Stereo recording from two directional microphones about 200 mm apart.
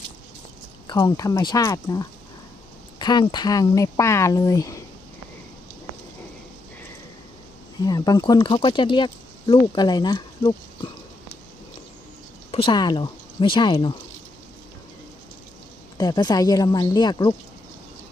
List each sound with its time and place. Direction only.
0.9 s speech: 20° left (ahead or behind)
7.9 s speech: 20° left (ahead or behind)
12.5 s speech: 25° left (ahead or behind)
16.0 s speech: 20° left (ahead or behind)